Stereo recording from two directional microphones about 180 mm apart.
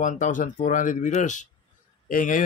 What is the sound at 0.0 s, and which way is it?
A man's voice, 45° left (ahead or behind).